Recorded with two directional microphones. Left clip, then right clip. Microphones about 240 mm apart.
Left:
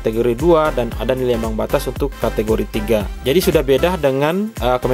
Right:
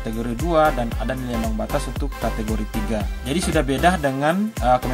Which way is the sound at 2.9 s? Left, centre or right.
Left.